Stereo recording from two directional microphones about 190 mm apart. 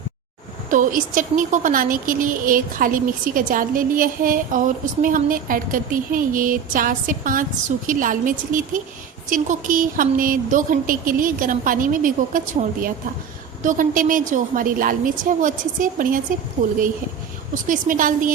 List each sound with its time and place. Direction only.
0.7 s a woman's voice: 45° right (ahead or behind)
13.6 s a woman's voice: 45° right (ahead or behind)